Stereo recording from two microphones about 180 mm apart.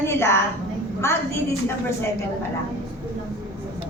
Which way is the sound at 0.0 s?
15° left (ahead or behind).